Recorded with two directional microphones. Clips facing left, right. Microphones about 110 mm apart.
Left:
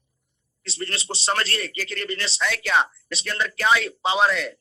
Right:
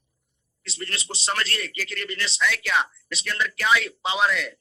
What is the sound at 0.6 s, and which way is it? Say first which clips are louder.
A man's voice: left 3 dB; 35° left (ahead or behind).